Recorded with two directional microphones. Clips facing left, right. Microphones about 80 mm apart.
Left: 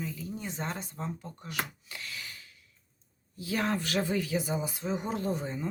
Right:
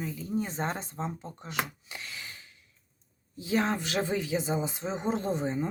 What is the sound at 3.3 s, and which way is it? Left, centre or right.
Speech, right.